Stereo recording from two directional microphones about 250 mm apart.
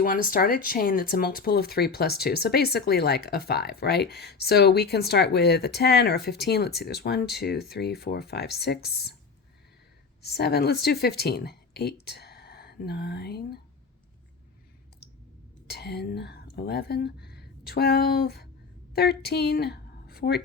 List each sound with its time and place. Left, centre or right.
0.0 s speech: left
10.2 s speech: left
15.6 s a woman's voice: left